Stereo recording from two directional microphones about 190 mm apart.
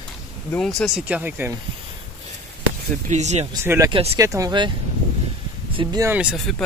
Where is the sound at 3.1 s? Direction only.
35° right (ahead or behind).